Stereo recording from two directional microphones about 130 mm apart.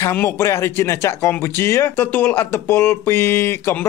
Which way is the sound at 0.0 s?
20° left (ahead or behind).